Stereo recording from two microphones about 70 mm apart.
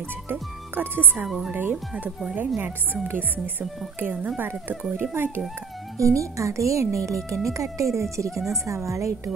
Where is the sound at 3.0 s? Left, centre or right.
Right.